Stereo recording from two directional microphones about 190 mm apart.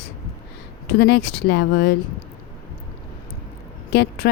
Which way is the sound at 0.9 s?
60° left (ahead or behind).